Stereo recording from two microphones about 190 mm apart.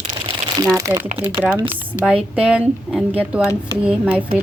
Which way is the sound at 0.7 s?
15° right (ahead or behind).